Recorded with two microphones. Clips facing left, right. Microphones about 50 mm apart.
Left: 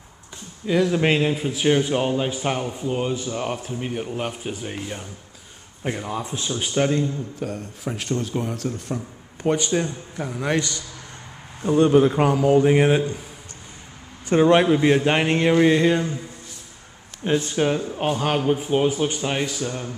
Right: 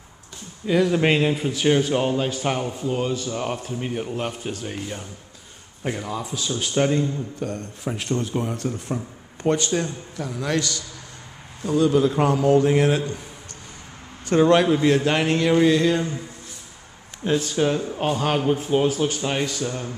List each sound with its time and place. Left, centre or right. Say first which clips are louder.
0.7 s a man's voice: even; centre
6.2 s a man's voice: even; left
6.5 s speech: even; centre
9.4 s a man's voice: even; centre; by 12.2 s left
12.4 s a man's voice: left 1 dB; centre
14.3 s a man's voice: left 1 dB; centre
17.2 s a man's voice: even; left
17.7 s a man's voice: even; centre
19.2 s a man's voice: even; centre